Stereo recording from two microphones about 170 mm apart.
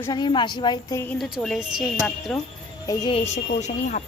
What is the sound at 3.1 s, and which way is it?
Speech, 40° left (ahead or behind).